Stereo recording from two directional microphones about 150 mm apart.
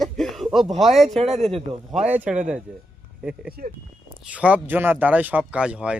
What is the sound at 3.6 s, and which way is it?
Speech, 70° right (ahead or behind).